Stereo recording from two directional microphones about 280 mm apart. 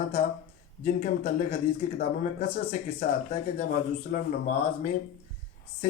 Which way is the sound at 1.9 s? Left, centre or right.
Left.